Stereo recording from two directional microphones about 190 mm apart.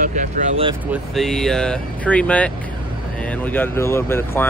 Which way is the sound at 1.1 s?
Centre (ahead or behind).